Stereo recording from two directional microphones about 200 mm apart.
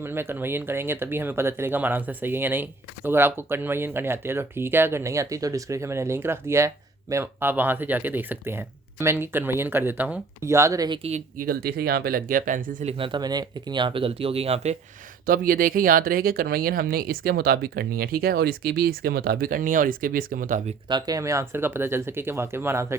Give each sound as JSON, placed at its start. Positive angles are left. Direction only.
{"t": 0.0, "sound": "speech", "side_deg": -10}
{"t": 11.3, "sound": "speech", "side_deg": -50}
{"t": 12.9, "sound": "speech", "side_deg": -25}
{"t": 15.3, "sound": "speech", "side_deg": -45}
{"t": 20.8, "sound": "speech", "side_deg": -20}